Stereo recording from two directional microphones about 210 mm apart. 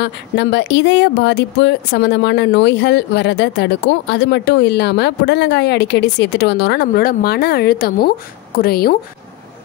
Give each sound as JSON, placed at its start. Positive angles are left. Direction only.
{"t": 0.0, "sound": "speech", "side_deg": 55}